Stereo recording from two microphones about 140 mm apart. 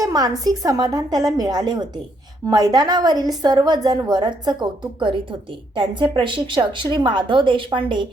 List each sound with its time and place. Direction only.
0.0 s a woman's voice: 25° right (ahead or behind)